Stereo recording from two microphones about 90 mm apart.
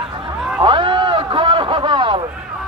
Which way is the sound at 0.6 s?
65° right (ahead or behind).